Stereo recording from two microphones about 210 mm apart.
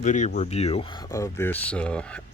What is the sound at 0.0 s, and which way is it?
Speech, 35° left (ahead or behind).